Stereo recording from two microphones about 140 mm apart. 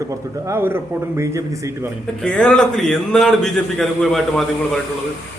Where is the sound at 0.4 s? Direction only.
15° right (ahead or behind).